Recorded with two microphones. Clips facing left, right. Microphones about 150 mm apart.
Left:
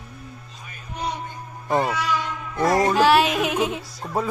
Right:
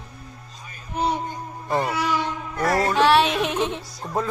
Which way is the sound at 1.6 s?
20° left (ahead or behind).